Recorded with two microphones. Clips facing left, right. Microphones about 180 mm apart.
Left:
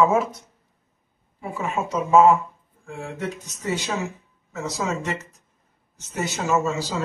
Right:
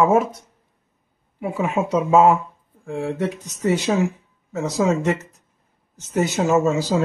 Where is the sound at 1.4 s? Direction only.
70° right (ahead or behind).